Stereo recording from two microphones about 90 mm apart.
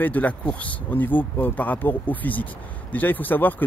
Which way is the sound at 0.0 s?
20° left (ahead or behind).